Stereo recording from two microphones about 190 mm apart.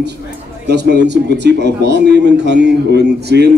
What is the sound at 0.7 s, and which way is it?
Speech, 60° right (ahead or behind).